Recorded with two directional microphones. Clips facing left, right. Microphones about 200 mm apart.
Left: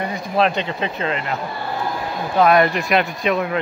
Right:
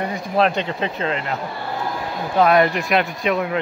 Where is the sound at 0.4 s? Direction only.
45° right (ahead or behind).